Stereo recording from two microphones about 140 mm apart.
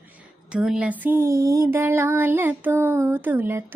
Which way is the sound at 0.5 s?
10° right (ahead or behind).